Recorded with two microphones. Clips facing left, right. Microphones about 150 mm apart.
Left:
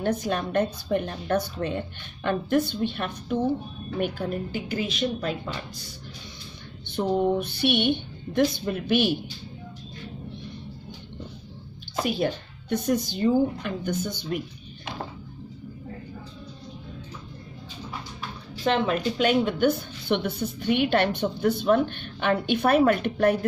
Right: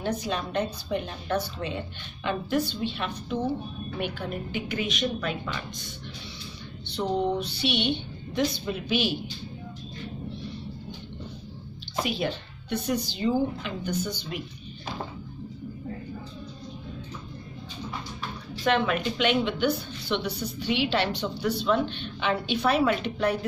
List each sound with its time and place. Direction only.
0.0 s a woman's voice: 55° left (ahead or behind)
4.0 s a woman's voice: 40° left (ahead or behind)
6.9 s speech: 50° left (ahead or behind)
12.0 s a woman's voice: 45° left (ahead or behind)
18.6 s a woman's voice: 30° left (ahead or behind); by 23.4 s 50° left (ahead or behind)